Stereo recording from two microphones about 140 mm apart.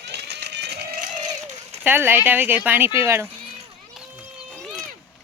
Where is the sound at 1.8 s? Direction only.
15° right (ahead or behind).